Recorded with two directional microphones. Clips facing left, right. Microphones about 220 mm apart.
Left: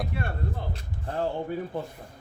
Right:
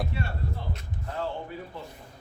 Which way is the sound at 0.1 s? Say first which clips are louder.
Left 1 dB; 55° left (ahead or behind).